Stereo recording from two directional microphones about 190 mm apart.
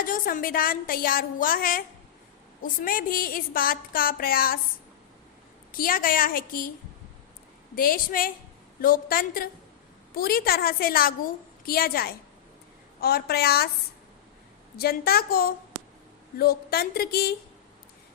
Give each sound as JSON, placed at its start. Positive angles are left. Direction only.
{"t": 0.0, "sound": "a woman's voice", "side_deg": 45}
{"t": 5.7, "sound": "a woman's voice", "side_deg": 50}
{"t": 7.8, "sound": "a woman's voice", "side_deg": 50}
{"t": 14.8, "sound": "a woman's voice", "side_deg": 55}